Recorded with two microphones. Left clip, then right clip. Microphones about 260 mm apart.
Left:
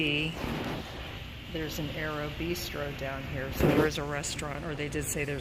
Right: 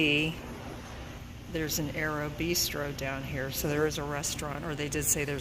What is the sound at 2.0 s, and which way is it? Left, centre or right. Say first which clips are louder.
Speech: right 1 dB; right.